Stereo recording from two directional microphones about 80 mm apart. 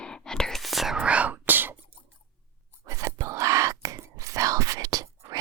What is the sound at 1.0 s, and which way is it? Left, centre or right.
Whispering, centre.